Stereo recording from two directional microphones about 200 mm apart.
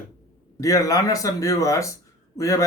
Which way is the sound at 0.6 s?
15° left (ahead or behind).